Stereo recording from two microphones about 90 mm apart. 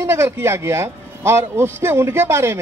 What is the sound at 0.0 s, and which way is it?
Speech, 30° right (ahead or behind).